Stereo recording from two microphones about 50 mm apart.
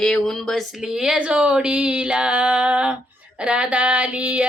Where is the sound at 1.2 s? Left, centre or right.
Right.